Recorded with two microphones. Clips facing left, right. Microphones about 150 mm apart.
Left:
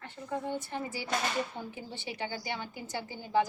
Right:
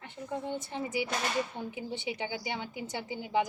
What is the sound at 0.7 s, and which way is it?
A woman's voice, 20° right (ahead or behind).